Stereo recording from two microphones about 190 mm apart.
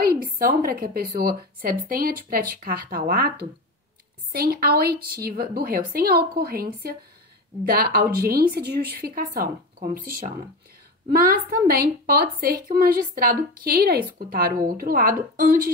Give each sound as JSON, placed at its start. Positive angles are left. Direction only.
{"t": 0.0, "sound": "a woman's voice", "side_deg": -50}